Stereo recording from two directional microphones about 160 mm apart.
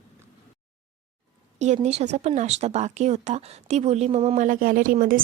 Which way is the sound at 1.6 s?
45° right (ahead or behind).